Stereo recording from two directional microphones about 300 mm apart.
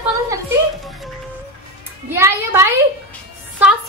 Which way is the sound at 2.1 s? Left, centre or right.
Centre.